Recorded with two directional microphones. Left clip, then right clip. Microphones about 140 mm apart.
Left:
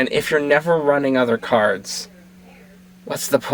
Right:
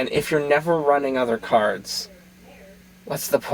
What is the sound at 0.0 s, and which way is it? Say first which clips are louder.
Speech: left 3 dB; 30° left (ahead or behind).